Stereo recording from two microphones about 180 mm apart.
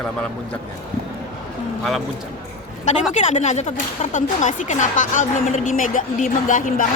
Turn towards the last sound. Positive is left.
turn(degrees=50)  # may be behind; listen again after turning